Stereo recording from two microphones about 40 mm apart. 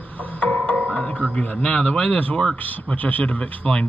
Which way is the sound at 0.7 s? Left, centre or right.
Left.